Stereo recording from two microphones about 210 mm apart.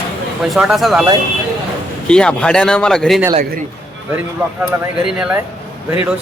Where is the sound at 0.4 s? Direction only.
Centre (ahead or behind).